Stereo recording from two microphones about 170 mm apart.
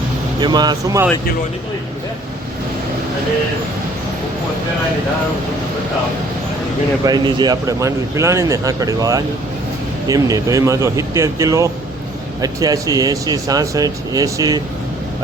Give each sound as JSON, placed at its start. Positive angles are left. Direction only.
{"t": 0.3, "sound": "speech", "side_deg": -25}
{"t": 7.0, "sound": "speech", "side_deg": -25}